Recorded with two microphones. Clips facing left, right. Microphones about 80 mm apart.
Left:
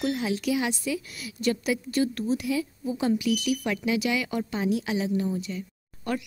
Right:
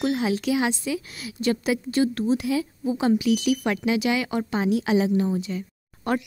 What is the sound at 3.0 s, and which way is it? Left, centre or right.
Speech, right.